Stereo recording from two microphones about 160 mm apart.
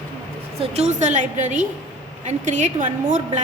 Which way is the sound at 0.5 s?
40° right (ahead or behind).